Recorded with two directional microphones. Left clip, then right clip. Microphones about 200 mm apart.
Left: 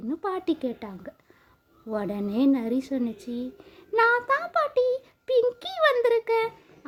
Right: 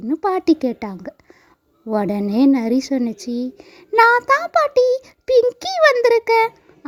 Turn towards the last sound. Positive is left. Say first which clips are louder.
# right 10 dB
turn(degrees=-35)  # may be behind; listen again after turning